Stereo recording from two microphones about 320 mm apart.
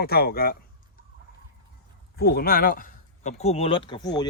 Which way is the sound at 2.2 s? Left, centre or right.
Left.